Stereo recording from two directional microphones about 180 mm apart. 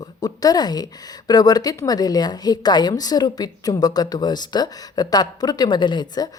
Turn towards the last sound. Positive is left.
turn(degrees=25)  # may be behind; listen again after turning